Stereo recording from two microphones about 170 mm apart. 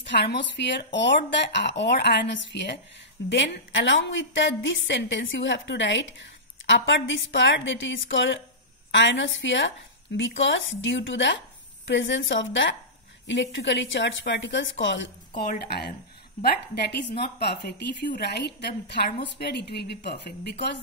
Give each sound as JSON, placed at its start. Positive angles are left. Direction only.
{"t": 0.0, "sound": "speech", "side_deg": 90}
{"t": 15.4, "sound": "speech", "side_deg": 60}
{"t": 16.4, "sound": "a woman's voice", "side_deg": 75}